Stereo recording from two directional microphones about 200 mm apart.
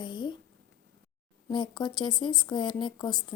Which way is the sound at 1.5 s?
20° left (ahead or behind).